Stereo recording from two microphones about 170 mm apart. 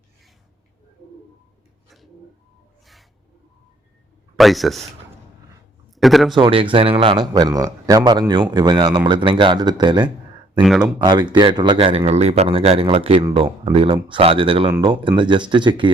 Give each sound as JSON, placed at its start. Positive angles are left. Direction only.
{"t": 4.4, "sound": "speech", "side_deg": 0}
{"t": 5.9, "sound": "a man's voice", "side_deg": 0}
{"t": 6.4, "sound": "a man's voice", "side_deg": -30}
{"t": 10.6, "sound": "speech", "side_deg": 0}
{"t": 10.9, "sound": "a man's voice", "side_deg": -25}